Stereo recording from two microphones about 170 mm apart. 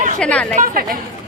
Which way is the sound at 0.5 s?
50° right (ahead or behind).